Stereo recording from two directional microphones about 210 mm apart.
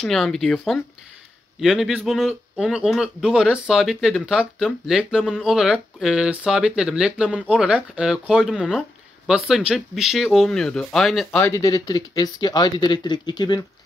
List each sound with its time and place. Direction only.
0.0 s a man's voice: centre (ahead or behind)
11.3 s speech: 15° left (ahead or behind)